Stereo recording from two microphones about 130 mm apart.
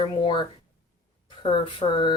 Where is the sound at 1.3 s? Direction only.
40° left (ahead or behind).